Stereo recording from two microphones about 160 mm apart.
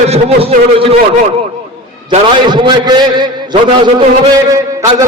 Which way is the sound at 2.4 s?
30° right (ahead or behind).